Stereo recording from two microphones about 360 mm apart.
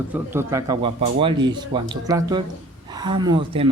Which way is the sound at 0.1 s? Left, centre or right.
Centre.